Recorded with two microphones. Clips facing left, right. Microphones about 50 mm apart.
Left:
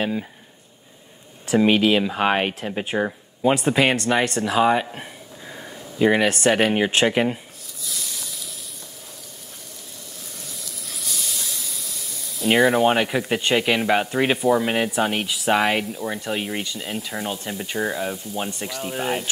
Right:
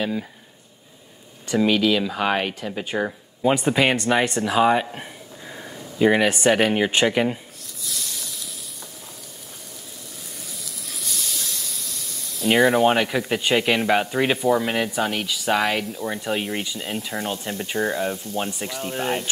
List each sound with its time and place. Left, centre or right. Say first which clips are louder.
1.7 s speech: even; left
2.8 s speech: left 2 dB; centre
3.1 s speech: left 1 dB; centre
7.8 s a sound: even; centre
10.5 s hiss: even; centre